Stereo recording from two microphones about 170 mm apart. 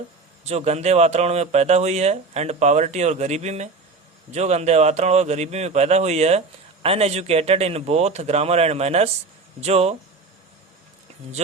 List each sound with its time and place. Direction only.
0.4 s speech: 40° right (ahead or behind)
11.4 s speech: 40° right (ahead or behind)